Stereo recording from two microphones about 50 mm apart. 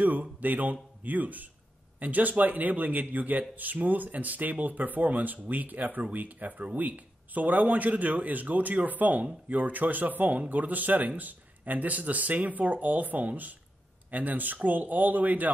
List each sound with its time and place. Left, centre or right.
0.0 s speech: right